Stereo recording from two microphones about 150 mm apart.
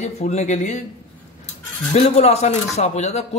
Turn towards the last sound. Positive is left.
turn(degrees=45)  # may be behind; listen again after turning